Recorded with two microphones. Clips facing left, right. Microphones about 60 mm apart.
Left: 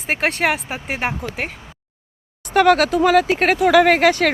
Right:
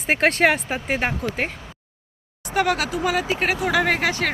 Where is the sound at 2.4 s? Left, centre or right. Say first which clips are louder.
Left 7 dB; left.